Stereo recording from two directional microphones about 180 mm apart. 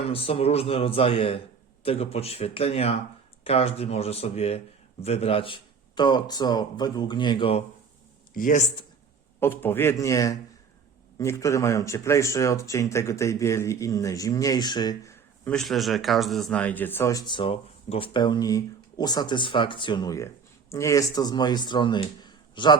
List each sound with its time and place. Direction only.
0.0 s speech: 30° left (ahead or behind)
8.3 s speech: 50° left (ahead or behind)
9.4 s speech: 10° left (ahead or behind)
15.4 s speech: centre (ahead or behind); by 22.7 s 25° left (ahead or behind)